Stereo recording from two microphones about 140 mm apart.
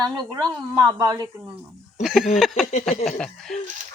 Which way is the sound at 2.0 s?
Centre (ahead or behind).